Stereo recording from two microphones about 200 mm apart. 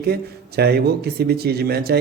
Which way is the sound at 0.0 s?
55° right (ahead or behind).